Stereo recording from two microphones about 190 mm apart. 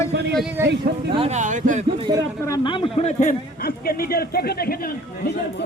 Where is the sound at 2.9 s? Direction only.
35° left (ahead or behind); by 5.4 s 60° left (ahead or behind).